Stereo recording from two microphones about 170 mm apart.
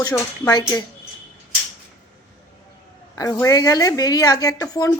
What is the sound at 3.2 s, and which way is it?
A woman's voice, 20° left (ahead or behind).